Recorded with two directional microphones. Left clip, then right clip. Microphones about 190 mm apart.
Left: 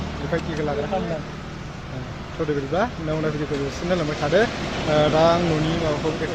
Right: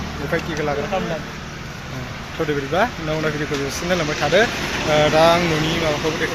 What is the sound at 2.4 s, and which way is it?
Speech, centre (ahead or behind).